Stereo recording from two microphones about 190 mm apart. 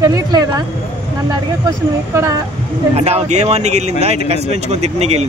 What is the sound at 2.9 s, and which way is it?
Speech, 35° right (ahead or behind).